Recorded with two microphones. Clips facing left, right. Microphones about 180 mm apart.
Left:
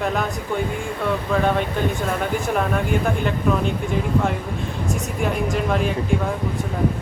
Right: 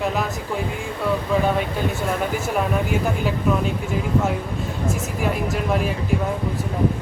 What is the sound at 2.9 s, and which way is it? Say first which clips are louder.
Speech: left 1 dB; 5° right (ahead or behind).